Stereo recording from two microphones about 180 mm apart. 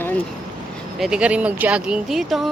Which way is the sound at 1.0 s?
5° right (ahead or behind).